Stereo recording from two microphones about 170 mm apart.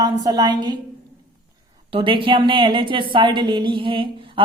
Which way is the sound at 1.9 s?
30° right (ahead or behind).